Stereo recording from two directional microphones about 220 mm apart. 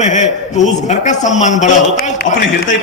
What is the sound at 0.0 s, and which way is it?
A man's voice, 35° left (ahead or behind).